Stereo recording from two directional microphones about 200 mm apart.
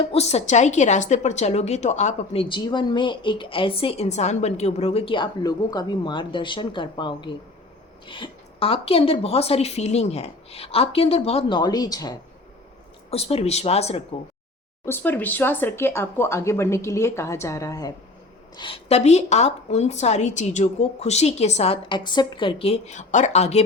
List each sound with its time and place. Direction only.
0.0 s a woman's voice: 30° left (ahead or behind)
13.1 s a woman's voice: 30° left (ahead or behind)
14.8 s a woman's voice: 10° left (ahead or behind); by 23.6 s 35° left (ahead or behind)